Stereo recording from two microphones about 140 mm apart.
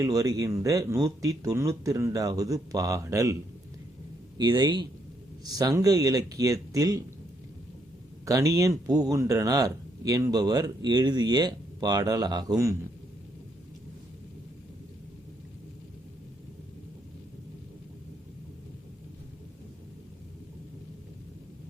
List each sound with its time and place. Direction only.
0.0 s speech: 25° right (ahead or behind)
4.4 s a man's voice: 30° right (ahead or behind)
8.2 s speech: 20° right (ahead or behind)